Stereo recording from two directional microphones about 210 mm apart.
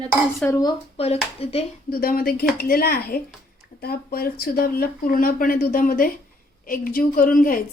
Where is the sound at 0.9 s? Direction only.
30° left (ahead or behind).